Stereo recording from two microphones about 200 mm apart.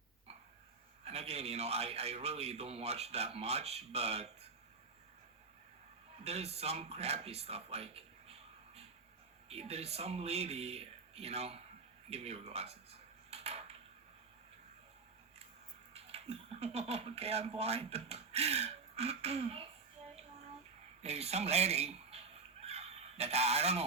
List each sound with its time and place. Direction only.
1.0 s a man's voice: 30° right (ahead or behind)
6.2 s a man's voice: 30° right (ahead or behind)
12.1 s dishes: 30° right (ahead or behind)
15.9 s speech: 30° right (ahead or behind)
21.0 s speech: 30° right (ahead or behind)
22.6 s a sound: 30° right (ahead or behind)